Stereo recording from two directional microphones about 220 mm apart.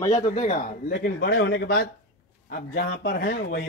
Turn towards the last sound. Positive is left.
turn(degrees=50)  # may be behind; listen again after turning